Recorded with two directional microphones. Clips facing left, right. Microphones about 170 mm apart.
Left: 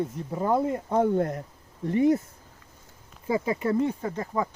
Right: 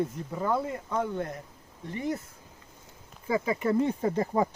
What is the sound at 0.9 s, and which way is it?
Speech, 45° left (ahead or behind).